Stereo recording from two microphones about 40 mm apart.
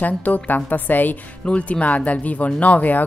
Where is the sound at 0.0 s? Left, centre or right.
Left.